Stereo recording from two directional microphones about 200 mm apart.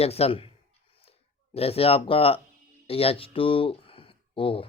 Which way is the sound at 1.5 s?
30° left (ahead or behind).